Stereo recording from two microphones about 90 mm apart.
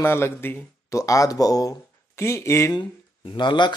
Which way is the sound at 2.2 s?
30° left (ahead or behind).